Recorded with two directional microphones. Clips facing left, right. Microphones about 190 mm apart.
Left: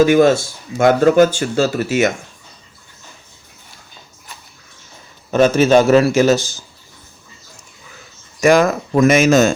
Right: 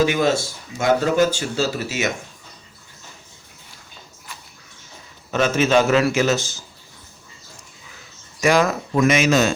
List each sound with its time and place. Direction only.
0.0 s speech: 50° left (ahead or behind)
5.3 s a man's voice: 40° left (ahead or behind)
8.4 s speech: 50° left (ahead or behind)